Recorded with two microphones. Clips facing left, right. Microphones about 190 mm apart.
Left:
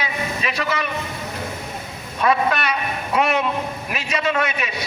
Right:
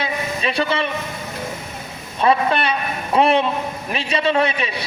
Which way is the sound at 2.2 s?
30° right (ahead or behind).